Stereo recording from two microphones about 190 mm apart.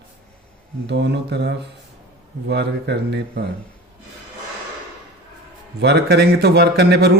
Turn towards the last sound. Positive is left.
turn(degrees=-60)  # may be behind; listen again after turning